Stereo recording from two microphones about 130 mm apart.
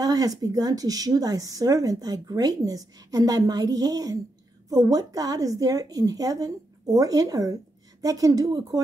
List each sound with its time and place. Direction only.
0.0 s speech: 30° right (ahead or behind)